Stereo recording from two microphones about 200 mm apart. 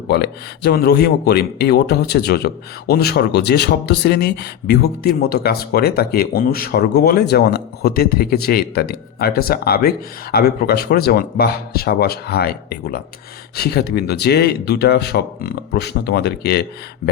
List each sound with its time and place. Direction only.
0.1 s speech: 55° left (ahead or behind)